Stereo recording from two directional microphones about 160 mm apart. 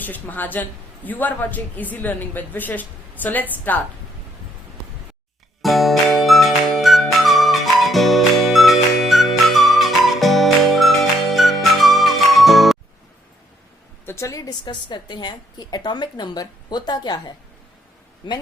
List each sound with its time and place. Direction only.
0.0 s a man's voice: 10° left (ahead or behind)
5.6 s music: centre (ahead or behind)
14.0 s a woman's voice: 15° left (ahead or behind)